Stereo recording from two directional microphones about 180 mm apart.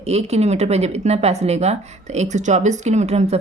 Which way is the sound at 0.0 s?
35° right (ahead or behind).